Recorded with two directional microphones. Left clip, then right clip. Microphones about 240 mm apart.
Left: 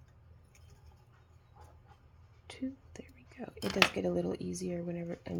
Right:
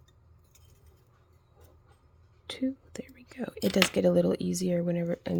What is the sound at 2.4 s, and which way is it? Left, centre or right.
Whispering, right.